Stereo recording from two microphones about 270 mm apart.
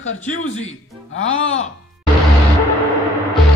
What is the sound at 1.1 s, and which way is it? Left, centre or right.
Speech, left.